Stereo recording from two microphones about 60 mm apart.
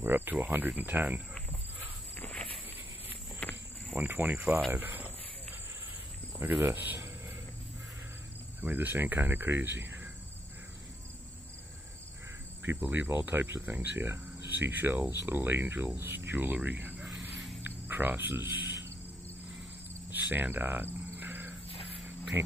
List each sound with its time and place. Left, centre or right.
0.0 s speech: right
2.1 s walk: left
3.4 s cricket: left
4.0 s speech: right
6.6 s cricket: right
8.5 s speech: right
12.6 s speech: right
17.6 s a sound: right
20.1 s cricket: right